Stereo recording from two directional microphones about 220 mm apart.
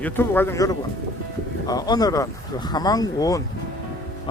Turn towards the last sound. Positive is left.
turn(degrees=15)  # may be behind; listen again after turning